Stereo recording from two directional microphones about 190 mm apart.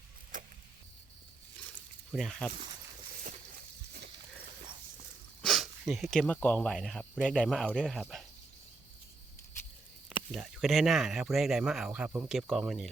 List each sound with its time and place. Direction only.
0.3 s vehicle: 45° right (ahead or behind)
2.1 s speech: centre (ahead or behind)
5.4 s speech: centre (ahead or behind)
10.3 s speech: centre (ahead or behind)